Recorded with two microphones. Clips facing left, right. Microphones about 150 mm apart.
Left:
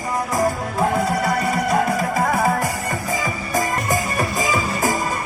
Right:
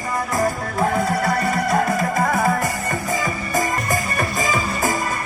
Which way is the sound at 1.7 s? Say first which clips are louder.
Even; 10° left (ahead or behind).